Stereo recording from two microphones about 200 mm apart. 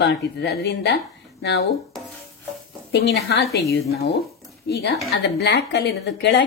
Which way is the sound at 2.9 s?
55° left (ahead or behind).